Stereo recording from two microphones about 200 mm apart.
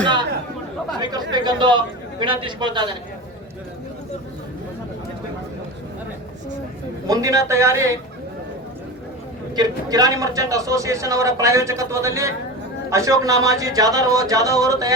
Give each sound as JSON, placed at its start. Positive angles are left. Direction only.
{"t": 0.9, "sound": "a man's voice", "side_deg": -20}
{"t": 7.1, "sound": "a man's voice", "side_deg": -15}
{"t": 9.6, "sound": "a man's voice", "side_deg": -20}